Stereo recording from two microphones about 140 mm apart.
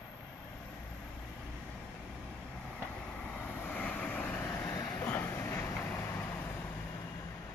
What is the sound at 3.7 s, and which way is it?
Vehicle, 10° left (ahead or behind).